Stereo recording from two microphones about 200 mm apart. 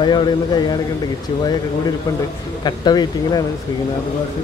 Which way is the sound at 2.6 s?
20° left (ahead or behind).